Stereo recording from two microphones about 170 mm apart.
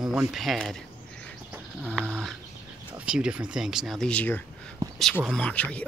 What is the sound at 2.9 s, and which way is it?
Speech, 5° right (ahead or behind).